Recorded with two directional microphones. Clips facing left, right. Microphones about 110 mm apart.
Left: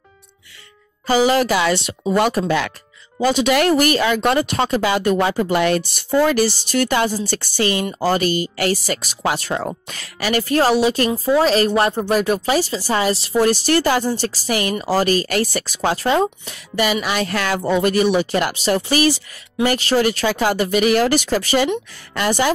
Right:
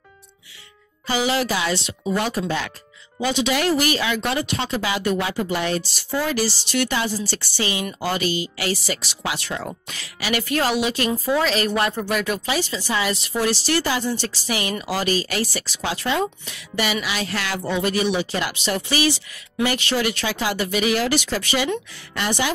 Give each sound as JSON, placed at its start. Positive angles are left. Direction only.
{"t": 1.0, "sound": "speech", "side_deg": 40}
{"t": 1.5, "sound": "speech", "side_deg": 60}
{"t": 3.2, "sound": "a woman's voice", "side_deg": 45}
{"t": 13.5, "sound": "speech", "side_deg": 50}
{"t": 18.5, "sound": "speech", "side_deg": 40}